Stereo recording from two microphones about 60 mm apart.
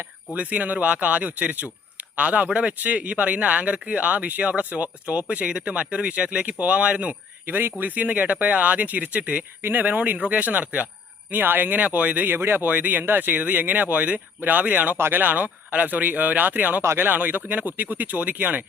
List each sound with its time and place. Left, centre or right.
0.3 s speech: right
12.6 s speech: right